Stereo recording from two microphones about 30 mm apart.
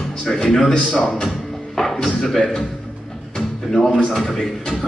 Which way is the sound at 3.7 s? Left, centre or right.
Centre.